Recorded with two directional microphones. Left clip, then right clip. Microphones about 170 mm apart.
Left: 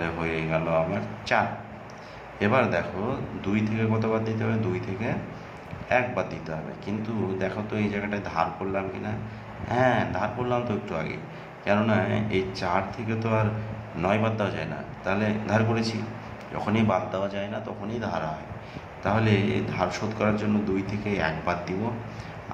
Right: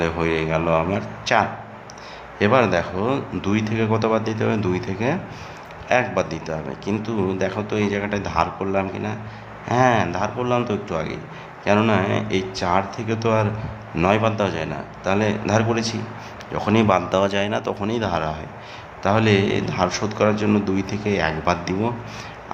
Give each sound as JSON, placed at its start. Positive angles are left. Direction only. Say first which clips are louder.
{"t": 0.0, "sound": "a man's voice", "louder": "right 7 dB", "side_deg": -30}